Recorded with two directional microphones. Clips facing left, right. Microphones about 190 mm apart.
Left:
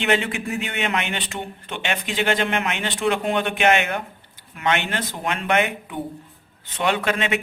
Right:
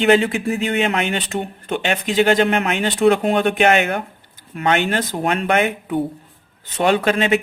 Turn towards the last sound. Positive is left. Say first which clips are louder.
# right 6 dB
turn(degrees=-35)  # may be behind; listen again after turning